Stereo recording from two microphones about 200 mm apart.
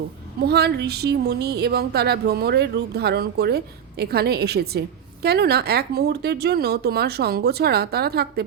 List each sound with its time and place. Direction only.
0.4 s speech: 55° right (ahead or behind)